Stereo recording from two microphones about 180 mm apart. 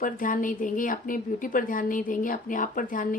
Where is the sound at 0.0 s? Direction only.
50° left (ahead or behind).